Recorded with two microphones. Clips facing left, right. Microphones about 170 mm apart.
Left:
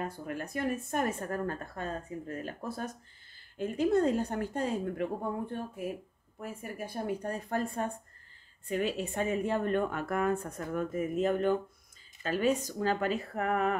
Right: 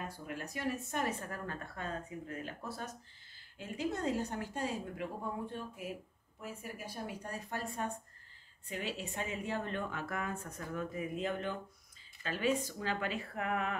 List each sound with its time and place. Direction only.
0.3 s a woman's voice: 50° left (ahead or behind)